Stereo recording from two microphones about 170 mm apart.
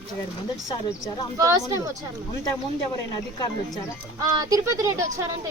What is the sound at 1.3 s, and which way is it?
Speech, 20° right (ahead or behind).